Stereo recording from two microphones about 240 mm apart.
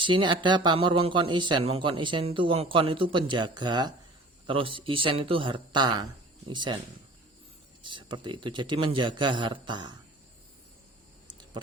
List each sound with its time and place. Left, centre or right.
0.0 s speech: centre
7.8 s speech: centre